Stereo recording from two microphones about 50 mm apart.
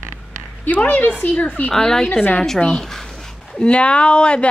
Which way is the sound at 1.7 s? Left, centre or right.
Centre.